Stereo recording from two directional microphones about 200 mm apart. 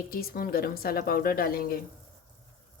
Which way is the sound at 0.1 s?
50° left (ahead or behind).